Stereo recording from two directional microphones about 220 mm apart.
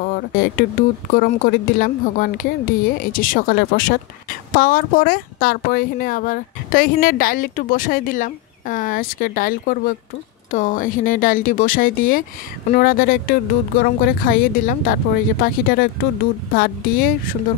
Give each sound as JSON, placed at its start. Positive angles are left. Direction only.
{"t": 0.0, "sound": "speech", "side_deg": 40}